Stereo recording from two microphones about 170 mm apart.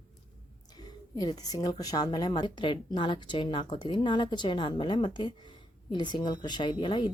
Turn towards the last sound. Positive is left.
turn(degrees=30)  # may be behind; listen again after turning